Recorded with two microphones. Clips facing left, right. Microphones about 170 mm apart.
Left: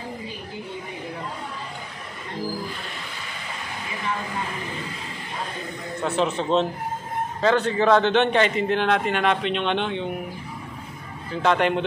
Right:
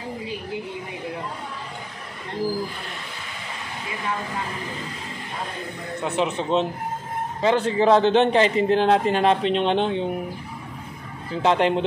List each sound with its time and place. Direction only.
6.0 s a man's voice: 15° right (ahead or behind); by 10.0 s 35° right (ahead or behind)
11.4 s speech: 25° right (ahead or behind)